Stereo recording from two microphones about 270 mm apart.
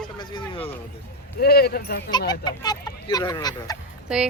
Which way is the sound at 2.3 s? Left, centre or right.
Centre.